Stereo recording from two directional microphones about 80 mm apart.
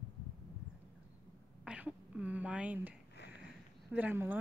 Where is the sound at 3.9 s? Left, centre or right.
Right.